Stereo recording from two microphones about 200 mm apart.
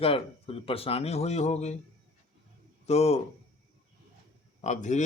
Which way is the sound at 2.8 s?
30° left (ahead or behind).